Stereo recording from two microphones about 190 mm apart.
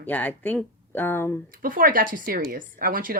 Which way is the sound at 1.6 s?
45° right (ahead or behind).